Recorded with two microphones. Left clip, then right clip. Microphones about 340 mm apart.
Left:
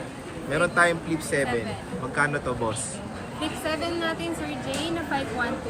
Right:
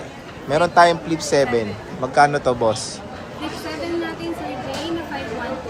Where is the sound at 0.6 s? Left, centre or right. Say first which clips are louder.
Right 8 dB; centre.